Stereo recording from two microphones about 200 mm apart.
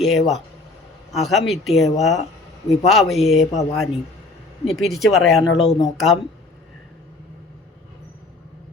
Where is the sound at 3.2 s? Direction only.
35° left (ahead or behind).